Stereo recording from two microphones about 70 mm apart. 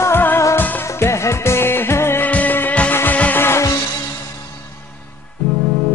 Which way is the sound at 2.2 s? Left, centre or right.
Left.